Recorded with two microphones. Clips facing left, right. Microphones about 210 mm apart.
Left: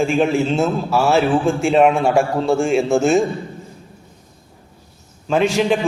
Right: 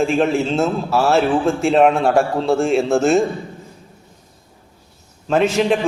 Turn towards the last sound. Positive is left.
turn(degrees=0)  # may be behind; listen again after turning